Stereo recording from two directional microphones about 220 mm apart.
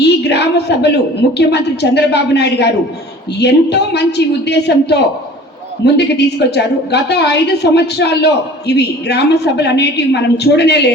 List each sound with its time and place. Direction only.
0.0 s a woman's voice: 50° left (ahead or behind)